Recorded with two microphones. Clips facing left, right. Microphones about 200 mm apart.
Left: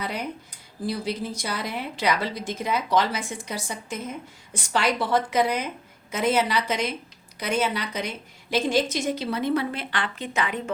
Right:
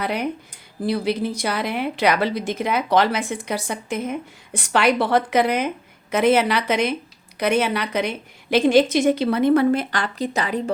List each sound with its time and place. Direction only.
0.0 s a woman's voice: 65° right (ahead or behind); by 10.6 s 35° right (ahead or behind)